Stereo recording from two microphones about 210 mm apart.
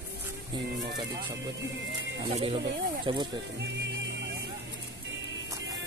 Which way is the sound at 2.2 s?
25° right (ahead or behind).